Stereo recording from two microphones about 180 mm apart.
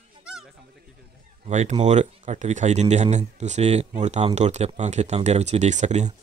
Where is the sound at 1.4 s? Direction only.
40° right (ahead or behind).